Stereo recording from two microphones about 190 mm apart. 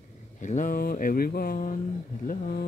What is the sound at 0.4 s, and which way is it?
Speech, 40° left (ahead or behind).